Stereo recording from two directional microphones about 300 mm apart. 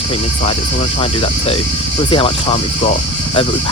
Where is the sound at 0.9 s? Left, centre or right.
Centre.